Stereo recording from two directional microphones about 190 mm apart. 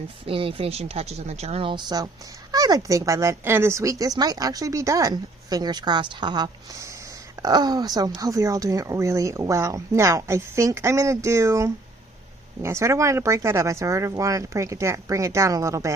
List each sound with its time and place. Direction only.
0.3 s speech: 30° right (ahead or behind)